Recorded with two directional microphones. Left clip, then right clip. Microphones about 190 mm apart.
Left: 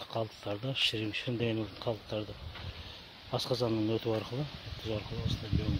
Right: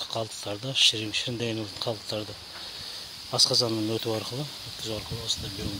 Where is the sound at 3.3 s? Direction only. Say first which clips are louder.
Right 9 dB; centre (ahead or behind).